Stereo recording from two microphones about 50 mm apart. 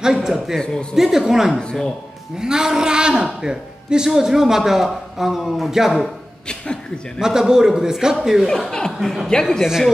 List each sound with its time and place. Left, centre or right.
0.0 s a man's voice: centre
1.5 s speech: centre
2.3 s a man's voice: centre
7.2 s a man's voice: centre
8.5 s speech: centre
9.0 s speech: centre